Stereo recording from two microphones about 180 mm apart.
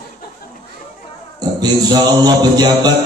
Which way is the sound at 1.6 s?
20° right (ahead or behind).